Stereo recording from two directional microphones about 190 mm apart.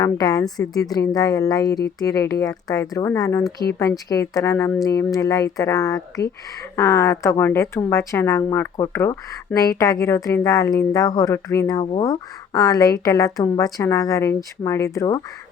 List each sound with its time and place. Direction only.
0.0 s a woman's voice: 20° left (ahead or behind)